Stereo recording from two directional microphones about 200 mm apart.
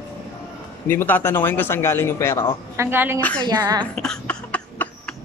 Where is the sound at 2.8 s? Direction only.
10° right (ahead or behind).